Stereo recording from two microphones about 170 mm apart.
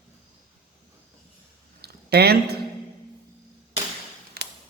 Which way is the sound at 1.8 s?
70° right (ahead or behind).